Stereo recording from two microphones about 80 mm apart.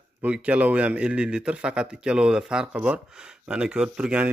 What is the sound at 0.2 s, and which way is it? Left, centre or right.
Speech, centre.